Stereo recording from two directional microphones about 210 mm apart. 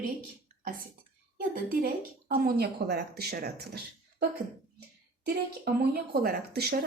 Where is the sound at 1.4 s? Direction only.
40° right (ahead or behind).